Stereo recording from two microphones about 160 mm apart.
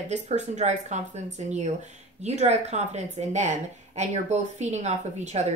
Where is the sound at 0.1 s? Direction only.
45° right (ahead or behind).